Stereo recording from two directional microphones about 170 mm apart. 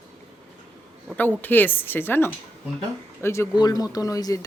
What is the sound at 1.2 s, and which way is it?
Speech, 10° left (ahead or behind).